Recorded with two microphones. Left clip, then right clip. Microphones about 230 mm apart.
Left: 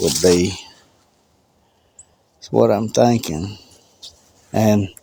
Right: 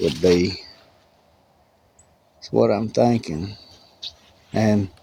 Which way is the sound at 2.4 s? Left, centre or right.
Left.